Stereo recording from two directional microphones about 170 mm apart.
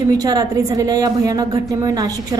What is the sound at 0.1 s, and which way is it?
A woman's voice, 20° right (ahead or behind).